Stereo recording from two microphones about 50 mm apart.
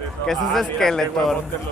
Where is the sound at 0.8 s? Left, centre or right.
Centre.